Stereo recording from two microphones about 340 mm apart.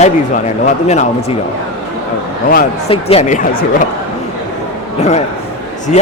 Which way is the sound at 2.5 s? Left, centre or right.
Left.